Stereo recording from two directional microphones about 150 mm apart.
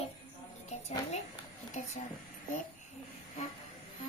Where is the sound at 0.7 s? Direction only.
45° left (ahead or behind).